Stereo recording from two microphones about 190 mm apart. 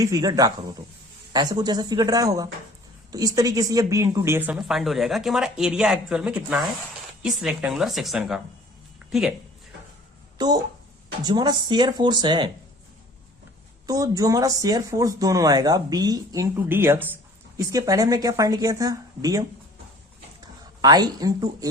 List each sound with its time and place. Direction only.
0.0 s speech: 20° right (ahead or behind)
4.5 s speech: centre (ahead or behind)
10.3 s speech: 20° right (ahead or behind)
13.8 s speech: 20° right (ahead or behind)
20.8 s speech: 20° right (ahead or behind)